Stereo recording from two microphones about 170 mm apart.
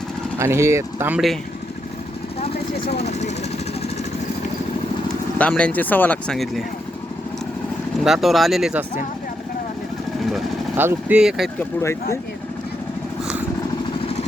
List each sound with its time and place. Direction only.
0.3 s speech: 15° right (ahead or behind)
2.9 s speech: 40° left (ahead or behind)
5.4 s speech: 5° left (ahead or behind)
8.0 s speech: centre (ahead or behind)
10.8 s speech: 10° right (ahead or behind)